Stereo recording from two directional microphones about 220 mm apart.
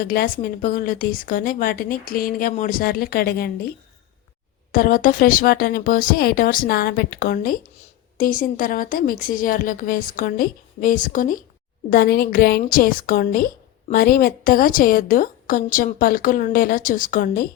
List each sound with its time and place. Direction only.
0.0 s a woman's voice: 40° left (ahead or behind)
4.7 s a woman's voice: 40° left (ahead or behind)